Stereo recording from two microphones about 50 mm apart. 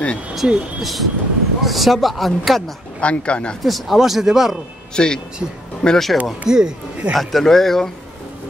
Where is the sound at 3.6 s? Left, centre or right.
Centre.